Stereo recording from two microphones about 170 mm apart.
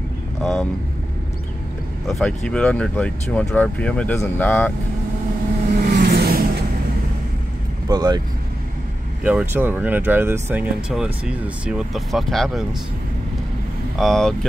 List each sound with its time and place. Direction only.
0.4 s speech: 5° left (ahead or behind)
2.0 s speech: 5° left (ahead or behind)
5.7 s vehicle: 65° right (ahead or behind)
7.9 s speech: 25° right (ahead or behind)
9.2 s speech: 10° right (ahead or behind)
13.9 s speech: centre (ahead or behind)